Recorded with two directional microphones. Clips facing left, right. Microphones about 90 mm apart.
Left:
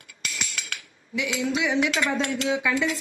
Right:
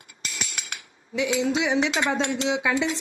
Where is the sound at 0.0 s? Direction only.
25° right (ahead or behind).